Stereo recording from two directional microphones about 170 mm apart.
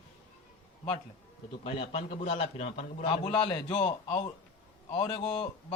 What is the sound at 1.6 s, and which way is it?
A man's voice, 35° left (ahead or behind).